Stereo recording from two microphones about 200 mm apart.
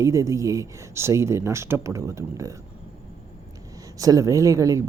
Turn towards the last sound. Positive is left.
turn(degrees=-15)  # may be behind; listen again after turning